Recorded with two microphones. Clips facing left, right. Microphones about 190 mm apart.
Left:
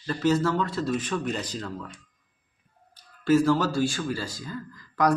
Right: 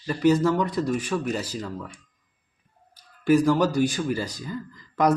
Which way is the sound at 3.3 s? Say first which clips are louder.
Right 2 dB; 15° right (ahead or behind).